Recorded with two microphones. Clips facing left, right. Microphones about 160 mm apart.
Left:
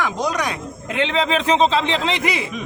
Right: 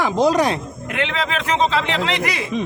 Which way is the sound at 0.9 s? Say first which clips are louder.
Left 3 dB; 25° left (ahead or behind).